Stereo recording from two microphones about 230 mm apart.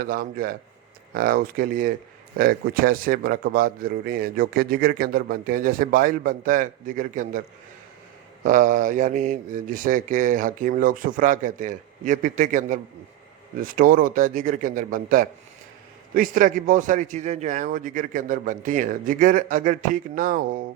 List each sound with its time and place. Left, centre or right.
0.0 s a man's voice: right
8.4 s a man's voice: right